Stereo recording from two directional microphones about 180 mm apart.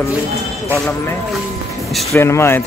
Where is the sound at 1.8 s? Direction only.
Centre (ahead or behind).